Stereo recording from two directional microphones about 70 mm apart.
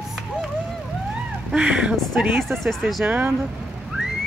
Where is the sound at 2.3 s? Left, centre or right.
Right.